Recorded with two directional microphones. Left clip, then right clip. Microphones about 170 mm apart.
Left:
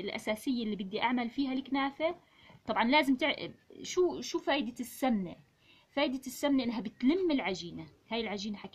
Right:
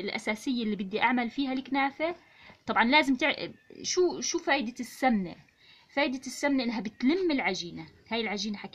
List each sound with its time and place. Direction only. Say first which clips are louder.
0.0 s speech: right 3 dB; 25° right (ahead or behind)